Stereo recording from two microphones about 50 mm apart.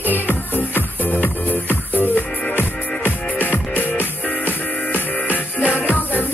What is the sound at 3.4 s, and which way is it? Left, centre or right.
Music, left.